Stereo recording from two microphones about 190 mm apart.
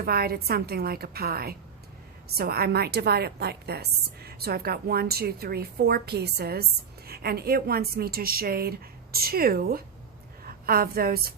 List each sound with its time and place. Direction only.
0.0 s a woman's voice: 55° right (ahead or behind)